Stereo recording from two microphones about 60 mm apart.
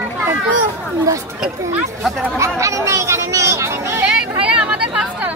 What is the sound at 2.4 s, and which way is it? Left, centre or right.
Chatter, right.